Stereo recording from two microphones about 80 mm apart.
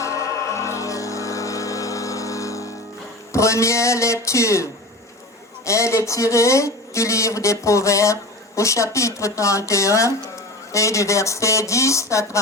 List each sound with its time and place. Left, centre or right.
0.0 s music: left
3.3 s speech: left